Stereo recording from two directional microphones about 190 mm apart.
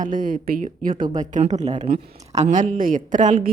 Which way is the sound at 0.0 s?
45° right (ahead or behind).